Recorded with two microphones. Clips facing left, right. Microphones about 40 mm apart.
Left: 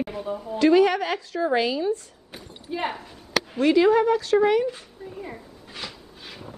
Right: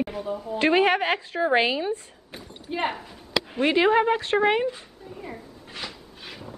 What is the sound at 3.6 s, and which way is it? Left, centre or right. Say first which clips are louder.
A woman's voice: left 2 dB; right.